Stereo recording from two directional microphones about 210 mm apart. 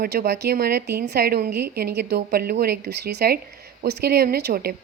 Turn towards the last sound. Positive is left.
turn(degrees=-45)  # may be behind; listen again after turning